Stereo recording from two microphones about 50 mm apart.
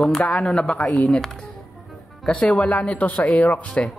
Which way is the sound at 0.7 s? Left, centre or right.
Left.